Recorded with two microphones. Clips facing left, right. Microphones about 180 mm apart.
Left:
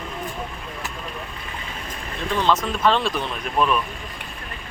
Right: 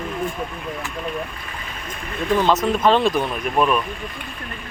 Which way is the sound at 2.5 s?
15° right (ahead or behind).